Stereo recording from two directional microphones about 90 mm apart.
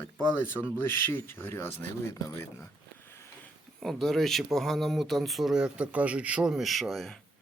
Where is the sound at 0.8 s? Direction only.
25° left (ahead or behind).